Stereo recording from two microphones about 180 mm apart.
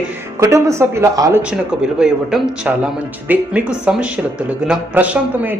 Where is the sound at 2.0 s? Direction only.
5° right (ahead or behind).